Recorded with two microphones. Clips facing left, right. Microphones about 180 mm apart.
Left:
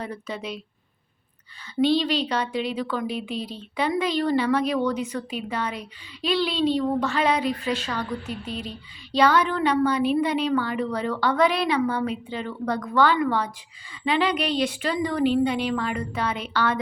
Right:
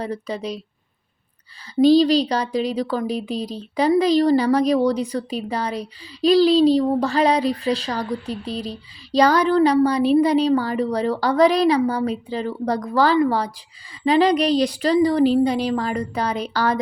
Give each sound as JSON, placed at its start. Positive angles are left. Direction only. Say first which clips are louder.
{"t": 0.0, "sound": "speech", "louder": "right 6 dB", "side_deg": -35}
{"t": 1.7, "sound": "speech", "louder": "right 7 dB", "side_deg": -40}